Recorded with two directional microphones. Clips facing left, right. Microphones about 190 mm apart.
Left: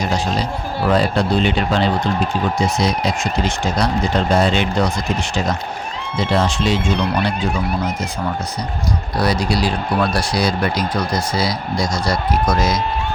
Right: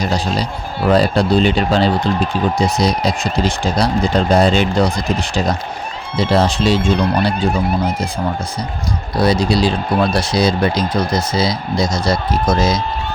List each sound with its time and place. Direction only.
0.0 s a sound: 35° right (ahead or behind)
0.9 s speech: 35° right (ahead or behind)
9.1 s speech: 25° right (ahead or behind)